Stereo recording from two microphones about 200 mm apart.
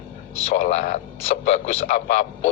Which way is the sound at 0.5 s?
35° left (ahead or behind).